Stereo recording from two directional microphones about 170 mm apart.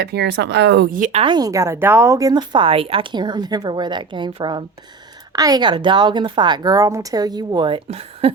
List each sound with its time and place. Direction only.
0.0 s speech: 80° right
0.9 s speech: 50° right (ahead or behind)
1.2 s speech: 25° right (ahead or behind)